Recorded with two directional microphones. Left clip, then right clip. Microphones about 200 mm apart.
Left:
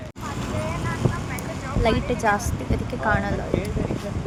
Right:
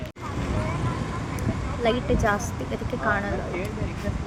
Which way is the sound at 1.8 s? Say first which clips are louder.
Left 1 dB; 5° left (ahead or behind).